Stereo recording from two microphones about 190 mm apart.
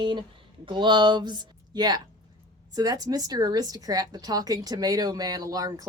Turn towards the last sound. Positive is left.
turn(degrees=-20)  # may be behind; listen again after turning